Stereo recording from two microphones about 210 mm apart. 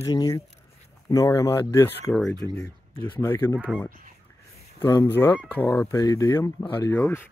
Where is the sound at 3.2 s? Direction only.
10° left (ahead or behind).